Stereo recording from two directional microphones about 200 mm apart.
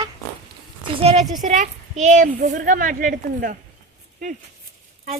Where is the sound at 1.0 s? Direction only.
35° right (ahead or behind).